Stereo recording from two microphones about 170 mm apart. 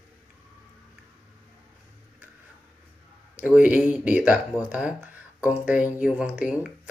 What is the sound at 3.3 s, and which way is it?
Speech, 10° right (ahead or behind).